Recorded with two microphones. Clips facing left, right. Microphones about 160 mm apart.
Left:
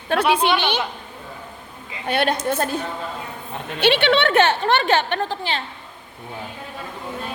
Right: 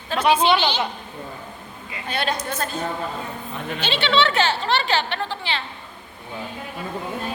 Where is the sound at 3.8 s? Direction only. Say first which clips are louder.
Left 4 dB; 60° left (ahead or behind); by 5.6 s 45° left (ahead or behind).